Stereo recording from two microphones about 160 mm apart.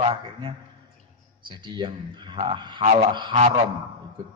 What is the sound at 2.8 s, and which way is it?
Honk, 45° right (ahead or behind).